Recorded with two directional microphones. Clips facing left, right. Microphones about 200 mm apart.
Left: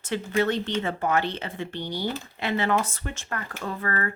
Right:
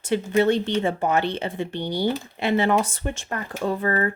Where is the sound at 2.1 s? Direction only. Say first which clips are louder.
Right 5 dB; 25° right (ahead or behind).